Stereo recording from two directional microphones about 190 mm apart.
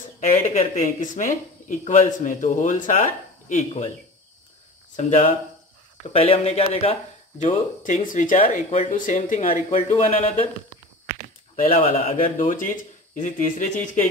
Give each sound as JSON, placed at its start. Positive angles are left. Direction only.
{"t": 0.2, "sound": "speech", "side_deg": 40}
{"t": 4.9, "sound": "speech", "side_deg": 35}
{"t": 11.8, "sound": "speech", "side_deg": 40}